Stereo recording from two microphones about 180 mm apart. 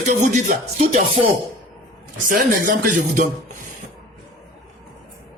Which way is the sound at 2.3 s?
45° right (ahead or behind).